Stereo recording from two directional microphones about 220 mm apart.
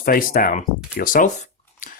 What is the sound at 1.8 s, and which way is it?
Scissors, 35° left (ahead or behind).